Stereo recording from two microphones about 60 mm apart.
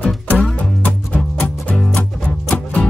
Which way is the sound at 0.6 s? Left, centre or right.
Left.